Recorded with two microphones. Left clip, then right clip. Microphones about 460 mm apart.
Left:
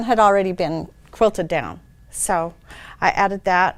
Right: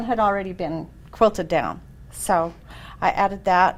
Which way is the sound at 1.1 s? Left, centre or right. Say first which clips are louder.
Left 1 dB; left.